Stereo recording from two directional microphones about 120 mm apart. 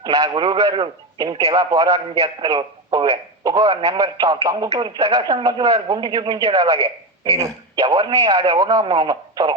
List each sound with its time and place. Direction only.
0.0 s speech: 35° right (ahead or behind)